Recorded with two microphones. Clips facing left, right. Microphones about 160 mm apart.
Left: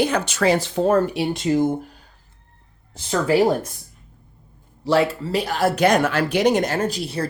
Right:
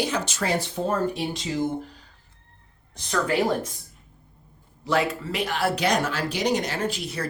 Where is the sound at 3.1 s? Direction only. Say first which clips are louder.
Left 6 dB; 35° left (ahead or behind).